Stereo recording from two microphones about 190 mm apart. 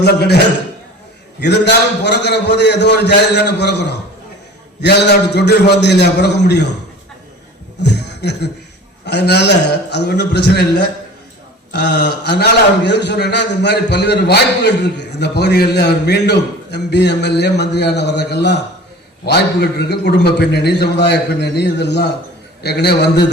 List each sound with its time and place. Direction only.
0.0 s a man's voice: 60° left (ahead or behind)
1.4 s a man's voice: 60° left (ahead or behind)
7.9 s a sound: 60° left (ahead or behind)
9.0 s a man's voice: 60° left (ahead or behind)